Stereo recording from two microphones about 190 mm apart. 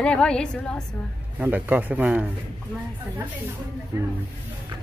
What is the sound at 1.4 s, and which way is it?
Speech, 10° right (ahead or behind).